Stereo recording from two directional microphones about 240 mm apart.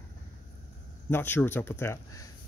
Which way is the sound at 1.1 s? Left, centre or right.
Centre.